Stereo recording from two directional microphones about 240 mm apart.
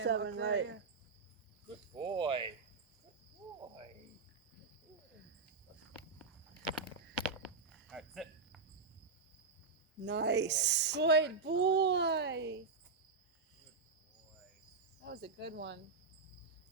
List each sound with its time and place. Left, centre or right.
0.0 s a woman's voice: right
2.0 s speech: centre
7.2 s cricket: centre
10.0 s a woman's voice: right
15.0 s a woman's voice: right